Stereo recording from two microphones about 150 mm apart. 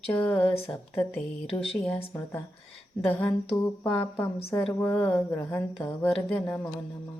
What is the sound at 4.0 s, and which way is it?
Speech, 15° left (ahead or behind).